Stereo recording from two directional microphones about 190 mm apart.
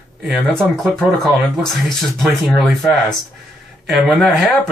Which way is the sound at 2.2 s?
Centre (ahead or behind).